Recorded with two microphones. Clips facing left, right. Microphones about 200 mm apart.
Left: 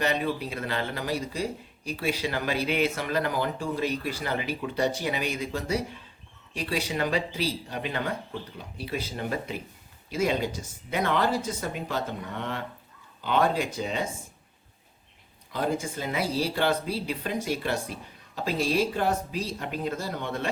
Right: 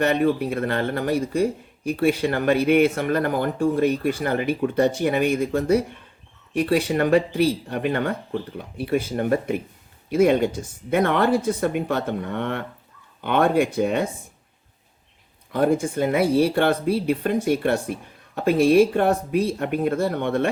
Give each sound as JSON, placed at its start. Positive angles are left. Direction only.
{"t": 0.0, "sound": "speech", "side_deg": -55}
{"t": 15.5, "sound": "speech", "side_deg": -55}